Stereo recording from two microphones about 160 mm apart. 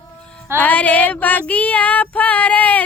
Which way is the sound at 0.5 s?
10° left (ahead or behind).